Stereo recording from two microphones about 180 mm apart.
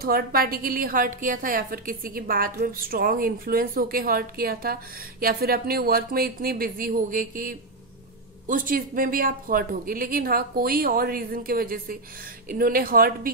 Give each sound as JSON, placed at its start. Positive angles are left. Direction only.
{"t": 0.0, "sound": "a woman's voice", "side_deg": -55}